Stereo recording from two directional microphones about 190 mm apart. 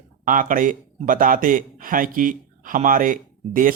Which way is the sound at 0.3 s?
45° right (ahead or behind).